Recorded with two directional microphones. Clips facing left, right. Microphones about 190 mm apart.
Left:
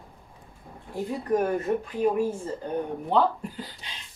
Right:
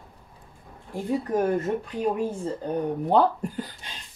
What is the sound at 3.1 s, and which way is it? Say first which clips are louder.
Speech: right 2 dB; 45° right (ahead or behind).